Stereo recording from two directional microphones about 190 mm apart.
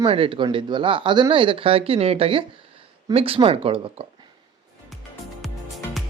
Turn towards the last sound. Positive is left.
turn(degrees=0)  # may be behind; listen again after turning